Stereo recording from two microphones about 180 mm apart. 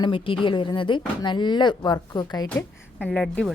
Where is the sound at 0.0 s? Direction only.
30° left (ahead or behind).